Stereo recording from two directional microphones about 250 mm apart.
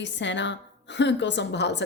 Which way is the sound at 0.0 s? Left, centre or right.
Left.